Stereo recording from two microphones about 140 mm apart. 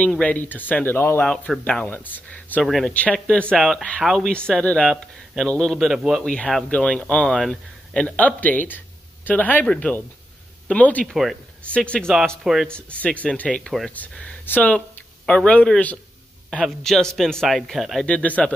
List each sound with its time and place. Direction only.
0.0 s speech: 10° left (ahead or behind)
12.7 s speech: 10° left (ahead or behind)